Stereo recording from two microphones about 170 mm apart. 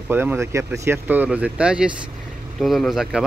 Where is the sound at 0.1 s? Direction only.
10° right (ahead or behind).